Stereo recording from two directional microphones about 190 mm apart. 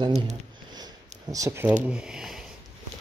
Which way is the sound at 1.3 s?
15° right (ahead or behind).